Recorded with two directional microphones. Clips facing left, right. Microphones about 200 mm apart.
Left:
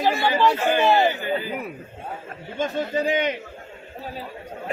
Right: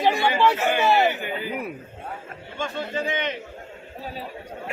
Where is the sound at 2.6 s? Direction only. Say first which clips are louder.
Left 5 dB; 40° left (ahead or behind).